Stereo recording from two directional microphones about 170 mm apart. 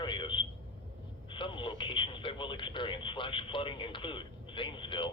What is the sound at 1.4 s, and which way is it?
Speech, 30° left (ahead or behind).